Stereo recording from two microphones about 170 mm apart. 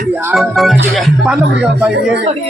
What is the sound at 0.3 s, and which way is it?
Speech, centre (ahead or behind).